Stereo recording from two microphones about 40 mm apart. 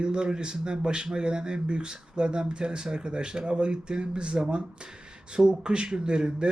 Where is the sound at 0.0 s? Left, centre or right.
Right.